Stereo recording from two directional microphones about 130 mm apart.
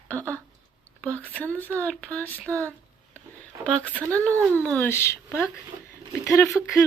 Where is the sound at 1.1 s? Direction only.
10° left (ahead or behind).